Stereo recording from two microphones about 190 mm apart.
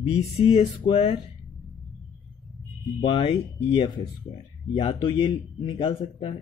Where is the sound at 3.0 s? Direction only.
30° left (ahead or behind).